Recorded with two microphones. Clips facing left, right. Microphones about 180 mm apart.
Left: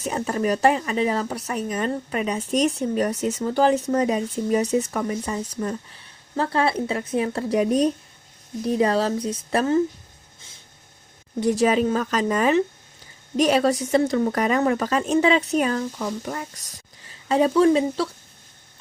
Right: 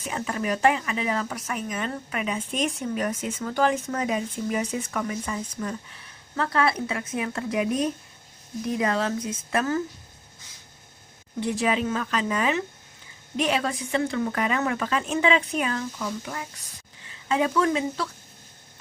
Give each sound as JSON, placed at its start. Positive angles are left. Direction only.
{"t": 0.0, "sound": "speech", "side_deg": 40}
{"t": 11.3, "sound": "speech", "side_deg": 40}